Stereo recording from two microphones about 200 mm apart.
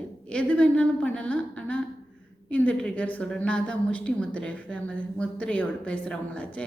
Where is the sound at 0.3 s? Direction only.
5° left (ahead or behind).